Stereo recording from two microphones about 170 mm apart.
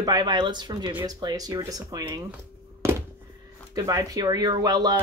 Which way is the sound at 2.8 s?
15° right (ahead or behind).